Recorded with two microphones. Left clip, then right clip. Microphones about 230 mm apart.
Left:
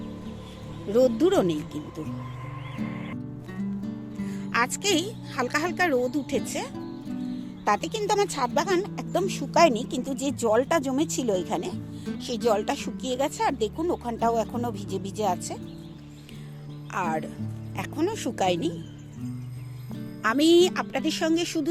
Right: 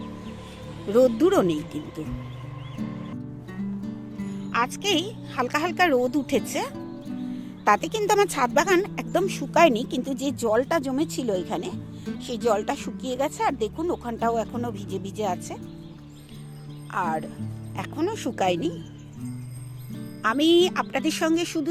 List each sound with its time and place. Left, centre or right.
0.9 s speech: centre
3.8 s music: centre
4.8 s speech: centre
7.6 s speech: centre
16.9 s speech: centre
19.9 s speech: centre